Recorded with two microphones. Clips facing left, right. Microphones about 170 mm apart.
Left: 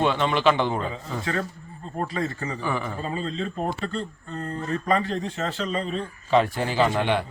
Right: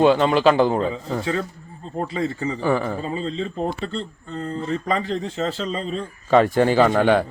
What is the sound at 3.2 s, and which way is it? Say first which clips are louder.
Speech: right 3 dB; 25° right (ahead or behind).